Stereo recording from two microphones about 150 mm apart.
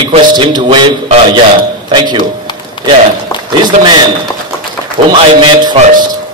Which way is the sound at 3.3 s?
30° left (ahead or behind).